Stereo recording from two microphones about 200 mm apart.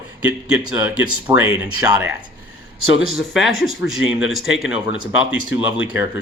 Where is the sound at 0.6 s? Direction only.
20° right (ahead or behind).